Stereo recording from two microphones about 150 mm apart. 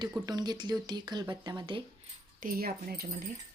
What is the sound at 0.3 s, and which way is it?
Speech, 25° right (ahead or behind).